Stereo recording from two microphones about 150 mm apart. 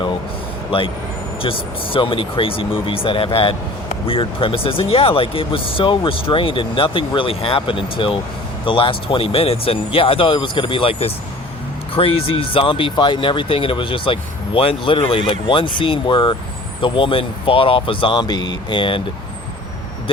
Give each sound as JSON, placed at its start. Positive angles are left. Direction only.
{"t": 1.4, "sound": "speech", "side_deg": 35}